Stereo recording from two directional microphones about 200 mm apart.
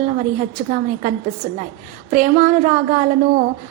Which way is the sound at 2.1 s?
40° right (ahead or behind).